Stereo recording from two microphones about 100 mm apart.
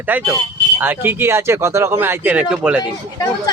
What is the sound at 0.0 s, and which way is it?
Speech, 20° right (ahead or behind).